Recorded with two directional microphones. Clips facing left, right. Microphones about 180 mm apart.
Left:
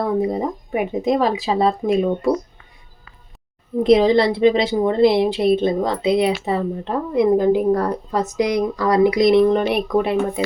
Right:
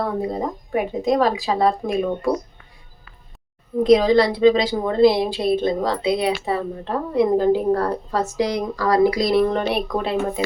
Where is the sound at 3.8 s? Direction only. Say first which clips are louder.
Left 1 dB; 25° left (ahead or behind).